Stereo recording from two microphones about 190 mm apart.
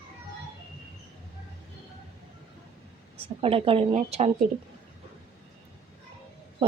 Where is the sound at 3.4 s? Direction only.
30° right (ahead or behind).